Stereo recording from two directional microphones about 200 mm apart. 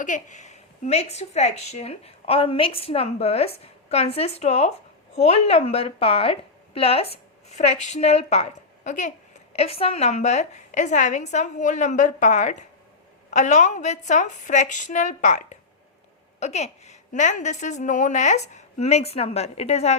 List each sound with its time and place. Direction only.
0.0 s a woman's voice: 40° left (ahead or behind)